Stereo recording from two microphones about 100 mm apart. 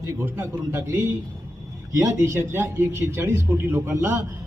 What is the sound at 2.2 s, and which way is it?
A man's voice, 20° right (ahead or behind).